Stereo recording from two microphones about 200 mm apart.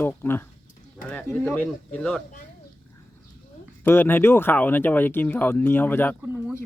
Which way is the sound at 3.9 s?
10° left (ahead or behind).